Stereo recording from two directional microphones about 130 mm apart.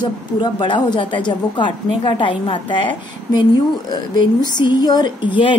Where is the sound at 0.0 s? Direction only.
35° left (ahead or behind).